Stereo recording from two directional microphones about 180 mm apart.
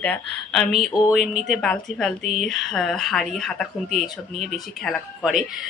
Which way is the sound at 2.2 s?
40° right (ahead or behind).